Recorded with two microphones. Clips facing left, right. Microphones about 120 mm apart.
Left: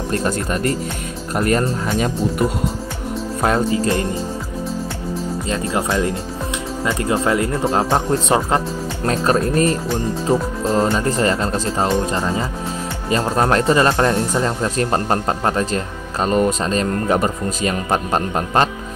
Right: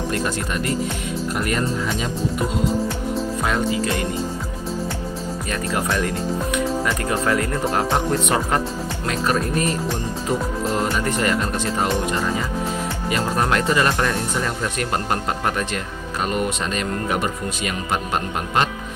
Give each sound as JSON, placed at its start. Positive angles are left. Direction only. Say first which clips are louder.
{"t": 0.1, "sound": "speech", "louder": "left 3 dB", "side_deg": 40}
{"t": 3.4, "sound": "speech", "louder": "left 6 dB", "side_deg": 35}
{"t": 5.5, "sound": "speech", "louder": "left 3 dB", "side_deg": 25}
{"t": 9.0, "sound": "speech", "louder": "left 5 dB", "side_deg": 35}